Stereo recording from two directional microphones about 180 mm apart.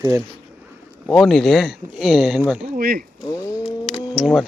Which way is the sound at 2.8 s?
55° right (ahead or behind).